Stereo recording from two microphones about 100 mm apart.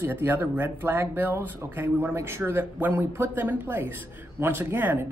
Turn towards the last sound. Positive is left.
turn(degrees=-20)  # may be behind; listen again after turning